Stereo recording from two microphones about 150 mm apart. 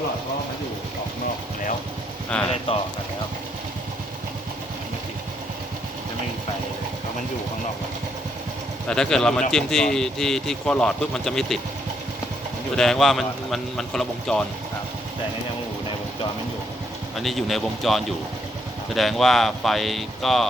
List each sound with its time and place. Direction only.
2.3 s speech: 10° left (ahead or behind)
2.7 s speech: 40° left (ahead or behind)
8.9 s speech: 5° left (ahead or behind)
12.7 s speech: 5° left (ahead or behind)
17.2 s speech: centre (ahead or behind)